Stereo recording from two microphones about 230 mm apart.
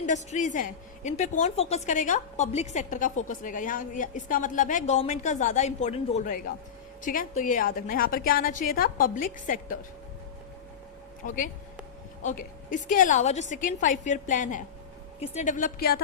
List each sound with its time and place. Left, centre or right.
0.0 s a woman's voice: left
11.2 s a woman's voice: left